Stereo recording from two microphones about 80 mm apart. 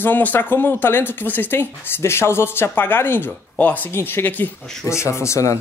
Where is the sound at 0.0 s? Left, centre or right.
Left.